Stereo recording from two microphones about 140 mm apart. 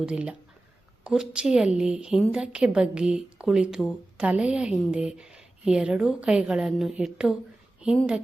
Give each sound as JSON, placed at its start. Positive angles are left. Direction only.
{"t": 0.0, "sound": "a woman's voice", "side_deg": -10}